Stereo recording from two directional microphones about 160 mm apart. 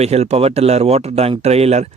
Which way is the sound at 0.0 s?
40° right (ahead or behind).